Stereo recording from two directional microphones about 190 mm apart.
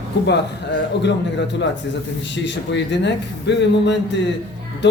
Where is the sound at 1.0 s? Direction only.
65° left (ahead or behind).